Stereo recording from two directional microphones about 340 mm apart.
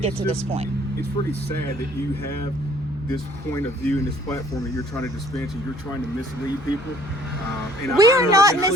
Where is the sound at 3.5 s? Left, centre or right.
Centre.